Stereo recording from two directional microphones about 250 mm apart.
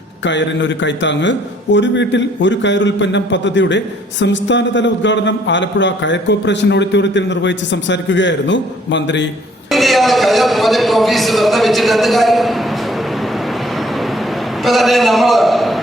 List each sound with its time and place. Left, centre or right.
0.3 s a man's voice: left
9.7 s a man's voice: centre
14.6 s a man's voice: centre